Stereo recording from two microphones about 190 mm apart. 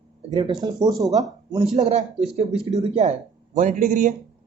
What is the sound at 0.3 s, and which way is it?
Speech, 25° right (ahead or behind).